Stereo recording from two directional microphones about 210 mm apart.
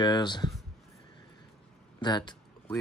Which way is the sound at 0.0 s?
20° left (ahead or behind).